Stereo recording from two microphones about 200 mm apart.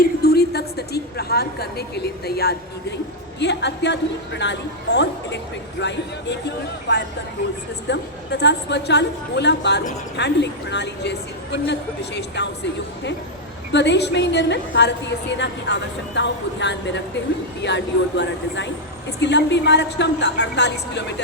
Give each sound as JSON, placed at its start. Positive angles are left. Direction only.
{"t": 0.0, "sound": "a woman's voice", "side_deg": 50}
{"t": 13.7, "sound": "a woman's voice", "side_deg": 60}